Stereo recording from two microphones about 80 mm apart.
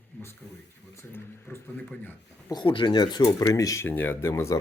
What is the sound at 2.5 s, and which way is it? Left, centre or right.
Speech, left.